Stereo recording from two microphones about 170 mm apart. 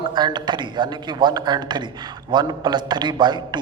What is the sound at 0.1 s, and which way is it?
Speech, 25° right (ahead or behind).